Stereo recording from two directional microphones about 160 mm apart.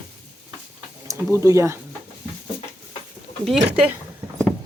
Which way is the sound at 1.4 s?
15° right (ahead or behind).